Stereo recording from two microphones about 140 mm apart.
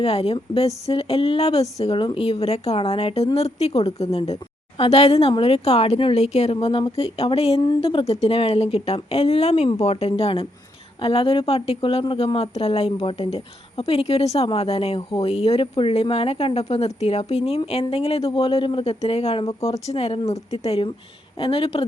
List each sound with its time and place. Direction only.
0.0 s speech: 45° left (ahead or behind)